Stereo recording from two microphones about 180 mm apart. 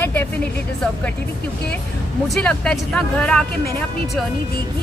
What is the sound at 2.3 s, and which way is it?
Speech, 5° left (ahead or behind).